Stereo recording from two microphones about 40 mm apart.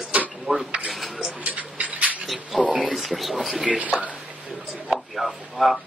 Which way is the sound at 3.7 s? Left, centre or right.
Right.